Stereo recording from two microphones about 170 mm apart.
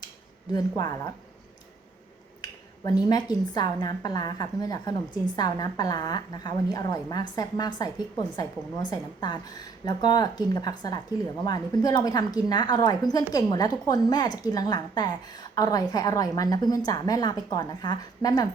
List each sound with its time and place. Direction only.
0.5 s a woman's voice: 20° left (ahead or behind)
2.4 s a woman's voice: 20° left (ahead or behind)